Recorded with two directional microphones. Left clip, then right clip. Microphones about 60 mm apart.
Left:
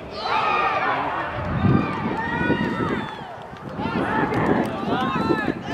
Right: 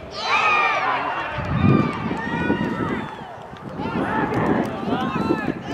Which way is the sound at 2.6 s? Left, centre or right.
Centre.